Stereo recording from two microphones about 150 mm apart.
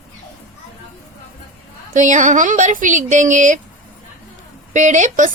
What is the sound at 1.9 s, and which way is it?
Speech, 55° right (ahead or behind).